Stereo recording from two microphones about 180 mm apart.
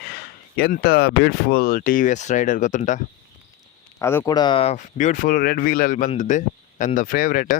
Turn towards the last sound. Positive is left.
turn(degrees=50)  # may be behind; listen again after turning